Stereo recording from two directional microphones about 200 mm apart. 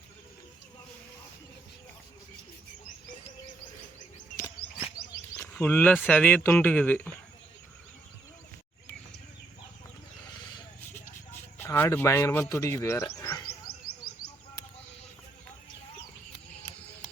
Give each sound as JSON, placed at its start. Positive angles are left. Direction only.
{"t": 5.4, "sound": "speech", "side_deg": 10}
{"t": 11.3, "sound": "speech", "side_deg": 10}
{"t": 13.1, "sound": "a sound", "side_deg": 15}